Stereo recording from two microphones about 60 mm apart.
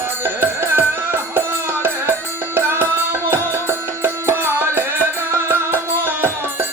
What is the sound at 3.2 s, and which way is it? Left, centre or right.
Music, right.